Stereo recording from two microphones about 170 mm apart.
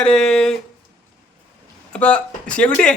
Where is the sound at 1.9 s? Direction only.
5° left (ahead or behind).